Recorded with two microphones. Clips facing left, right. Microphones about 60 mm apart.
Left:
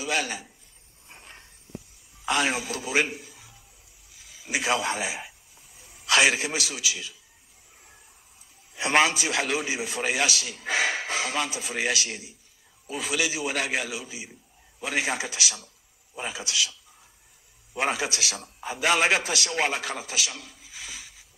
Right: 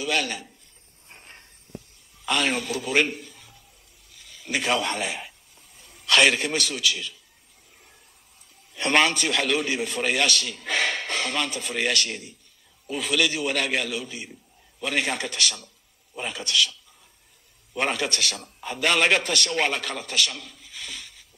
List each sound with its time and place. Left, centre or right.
0.0 s speech: centre
2.2 s a man's voice: centre
8.7 s a man's voice: centre
17.7 s a man's voice: centre
20.7 s a sound: centre